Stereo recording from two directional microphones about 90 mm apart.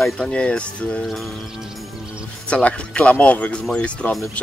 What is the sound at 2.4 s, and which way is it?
Speech, 15° left (ahead or behind).